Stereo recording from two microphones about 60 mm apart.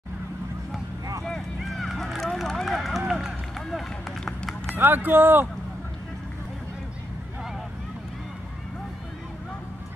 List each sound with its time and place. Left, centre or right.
1.6 s run: centre
4.2 s run: centre
4.7 s speech: right